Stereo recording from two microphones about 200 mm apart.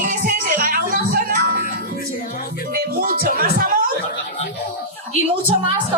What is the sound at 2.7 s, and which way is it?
Music, 50° right (ahead or behind).